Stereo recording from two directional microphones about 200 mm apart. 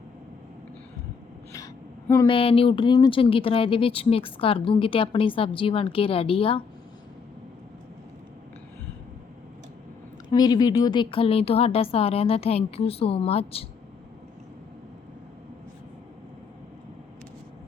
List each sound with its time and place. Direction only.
1.5 s a sound: 15° left (ahead or behind)
2.3 s speech: 25° left (ahead or behind)
10.2 s speech: 20° left (ahead or behind)